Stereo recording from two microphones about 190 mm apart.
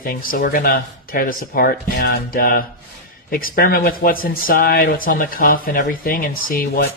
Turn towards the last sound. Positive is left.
turn(degrees=50)  # may be behind; listen again after turning